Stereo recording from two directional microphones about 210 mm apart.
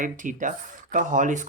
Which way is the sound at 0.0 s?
40° right (ahead or behind).